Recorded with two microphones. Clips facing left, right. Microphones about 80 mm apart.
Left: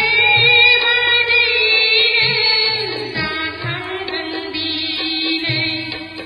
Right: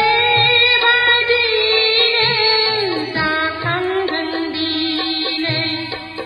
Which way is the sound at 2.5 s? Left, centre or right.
Right.